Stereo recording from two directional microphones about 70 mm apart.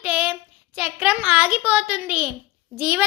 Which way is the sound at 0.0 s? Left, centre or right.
Right.